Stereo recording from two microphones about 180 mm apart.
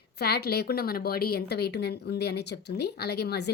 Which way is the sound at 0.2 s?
65° left (ahead or behind).